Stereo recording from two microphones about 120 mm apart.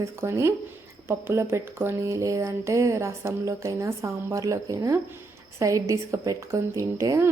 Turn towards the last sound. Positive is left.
turn(degrees=-25)  # may be behind; listen again after turning